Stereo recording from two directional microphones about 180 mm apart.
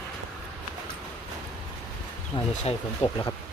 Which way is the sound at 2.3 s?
30° left (ahead or behind).